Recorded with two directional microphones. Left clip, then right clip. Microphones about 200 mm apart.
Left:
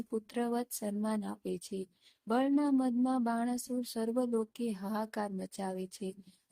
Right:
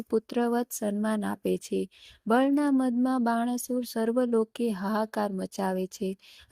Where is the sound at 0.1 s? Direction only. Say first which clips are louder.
Right 9 dB; 25° right (ahead or behind).